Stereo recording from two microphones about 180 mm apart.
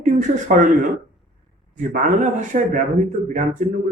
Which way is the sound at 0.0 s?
45° right (ahead or behind).